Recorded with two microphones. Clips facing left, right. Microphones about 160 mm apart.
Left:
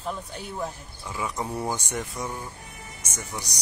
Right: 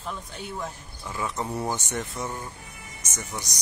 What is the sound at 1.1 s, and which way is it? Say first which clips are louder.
Speech: even; 10° left (ahead or behind).